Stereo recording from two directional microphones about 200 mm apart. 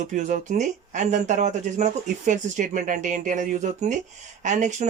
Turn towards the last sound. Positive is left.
turn(degrees=-35)  # may be behind; listen again after turning